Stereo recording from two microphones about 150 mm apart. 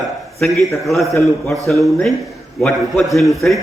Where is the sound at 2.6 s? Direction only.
Centre (ahead or behind).